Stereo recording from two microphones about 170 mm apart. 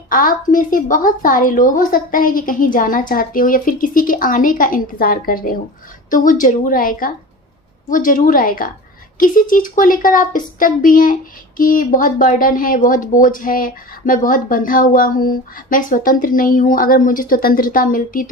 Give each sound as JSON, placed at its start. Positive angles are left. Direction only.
{"t": 0.1, "sound": "a woman's voice", "side_deg": 55}